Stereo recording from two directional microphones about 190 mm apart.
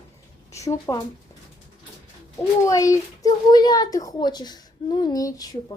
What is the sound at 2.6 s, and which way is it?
A child's voice, 15° left (ahead or behind).